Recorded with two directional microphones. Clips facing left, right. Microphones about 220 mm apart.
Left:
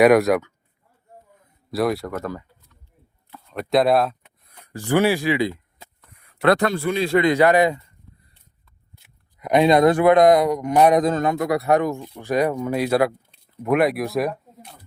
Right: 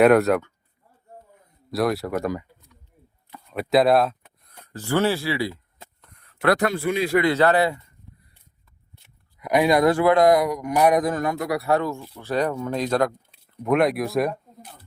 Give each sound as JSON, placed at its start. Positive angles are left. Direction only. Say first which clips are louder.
{"t": 0.0, "sound": "speech", "louder": "left 1 dB", "side_deg": 10}
{"t": 1.7, "sound": "speech", "louder": "left 1 dB", "side_deg": 0}
{"t": 2.1, "sound": "a sound", "louder": "right 3 dB", "side_deg": -15}
{"t": 3.3, "sound": "speech", "louder": "even", "side_deg": -5}
{"t": 4.9, "sound": "speech", "louder": "left 3 dB", "side_deg": 15}
{"t": 5.8, "sound": "a sound", "louder": "even", "side_deg": 5}
{"t": 7.1, "sound": "speech", "louder": "left 3 dB", "side_deg": 20}
{"t": 9.4, "sound": "speech", "louder": "left 3 dB", "side_deg": 25}